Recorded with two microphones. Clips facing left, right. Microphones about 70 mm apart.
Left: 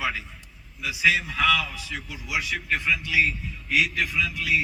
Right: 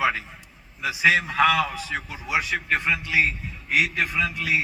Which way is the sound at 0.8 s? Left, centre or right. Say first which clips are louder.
Right 3 dB; right.